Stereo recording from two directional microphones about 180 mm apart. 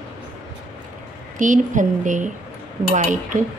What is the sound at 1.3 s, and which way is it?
A woman's voice, 45° right (ahead or behind).